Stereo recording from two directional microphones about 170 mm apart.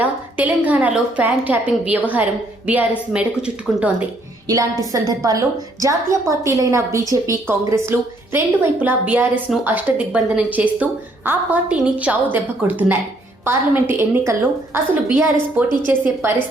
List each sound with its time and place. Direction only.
0.0 s a woman's voice: 10° right (ahead or behind)
3.1 s a woman's voice: 5° right (ahead or behind)
4.4 s a woman's voice: 20° right (ahead or behind)